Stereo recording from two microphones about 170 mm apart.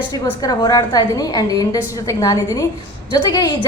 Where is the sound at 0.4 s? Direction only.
20° left (ahead or behind).